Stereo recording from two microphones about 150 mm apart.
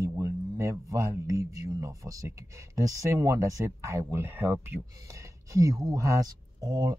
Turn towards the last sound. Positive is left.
turn(degrees=-25)  # may be behind; listen again after turning